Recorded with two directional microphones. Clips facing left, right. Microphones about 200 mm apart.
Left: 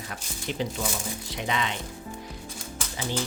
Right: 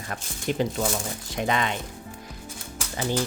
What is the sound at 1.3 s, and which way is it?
Speech, 50° right (ahead or behind).